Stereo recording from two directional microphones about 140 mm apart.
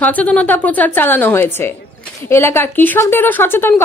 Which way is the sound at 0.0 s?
10° left (ahead or behind).